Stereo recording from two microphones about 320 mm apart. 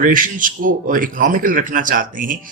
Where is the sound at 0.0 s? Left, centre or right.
Right.